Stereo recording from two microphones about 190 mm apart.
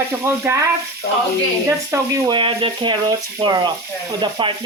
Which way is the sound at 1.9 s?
20° right (ahead or behind).